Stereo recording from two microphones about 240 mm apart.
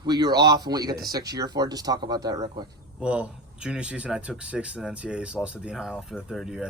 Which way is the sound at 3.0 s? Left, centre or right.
Centre.